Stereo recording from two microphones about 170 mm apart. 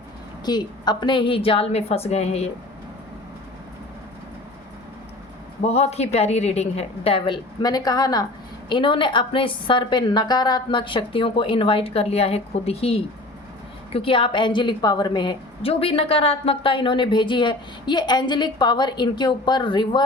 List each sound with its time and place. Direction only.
0.4 s a woman's voice: 25° left (ahead or behind)
5.6 s a woman's voice: 40° left (ahead or behind)